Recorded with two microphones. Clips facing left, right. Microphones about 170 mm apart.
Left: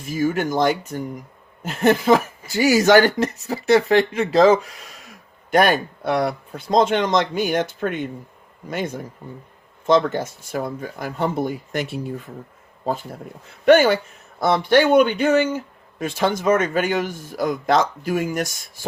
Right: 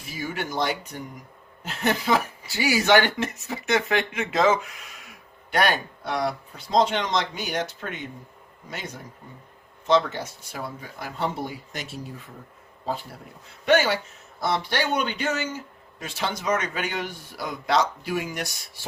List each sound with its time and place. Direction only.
0.0 s speech: 45° left (ahead or behind)
12.8 s a man's voice: 45° left (ahead or behind)